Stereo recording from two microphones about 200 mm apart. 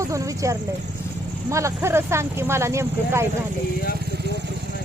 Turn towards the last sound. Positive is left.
turn(degrees=-15)  # may be behind; listen again after turning